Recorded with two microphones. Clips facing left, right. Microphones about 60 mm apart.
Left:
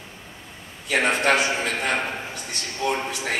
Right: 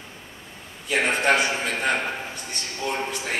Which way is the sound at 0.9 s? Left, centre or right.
Left.